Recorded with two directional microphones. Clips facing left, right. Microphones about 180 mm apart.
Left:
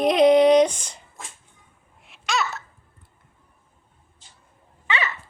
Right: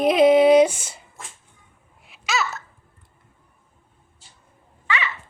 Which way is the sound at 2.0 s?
Centre (ahead or behind).